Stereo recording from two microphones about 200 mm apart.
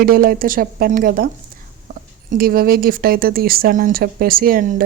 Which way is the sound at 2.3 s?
45° right (ahead or behind).